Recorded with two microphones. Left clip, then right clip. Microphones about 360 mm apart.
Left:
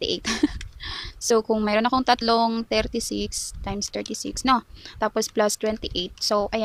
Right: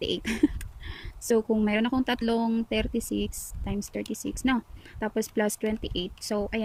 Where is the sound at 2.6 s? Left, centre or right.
Left.